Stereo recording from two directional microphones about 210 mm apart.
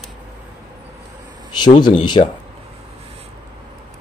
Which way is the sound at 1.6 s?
20° left (ahead or behind).